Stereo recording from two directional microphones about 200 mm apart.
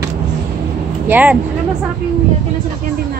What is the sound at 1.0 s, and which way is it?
Speech, 10° right (ahead or behind).